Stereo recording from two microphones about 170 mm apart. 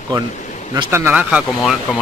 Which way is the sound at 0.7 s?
15° right (ahead or behind).